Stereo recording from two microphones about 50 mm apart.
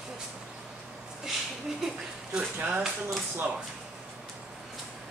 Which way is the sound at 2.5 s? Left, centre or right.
Right.